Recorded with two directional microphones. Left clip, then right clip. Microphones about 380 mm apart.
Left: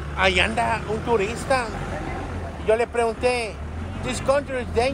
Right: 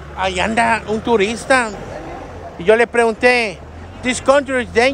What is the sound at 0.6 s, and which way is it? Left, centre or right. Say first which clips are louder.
Speech: right 8 dB; right.